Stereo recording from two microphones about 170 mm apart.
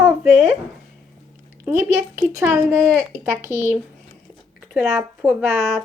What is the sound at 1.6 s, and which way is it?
A woman's voice, 15° right (ahead or behind).